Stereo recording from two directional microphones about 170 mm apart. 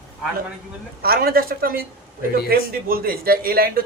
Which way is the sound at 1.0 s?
65° right (ahead or behind).